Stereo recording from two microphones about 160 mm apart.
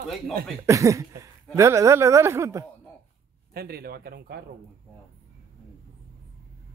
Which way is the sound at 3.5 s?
75° right (ahead or behind).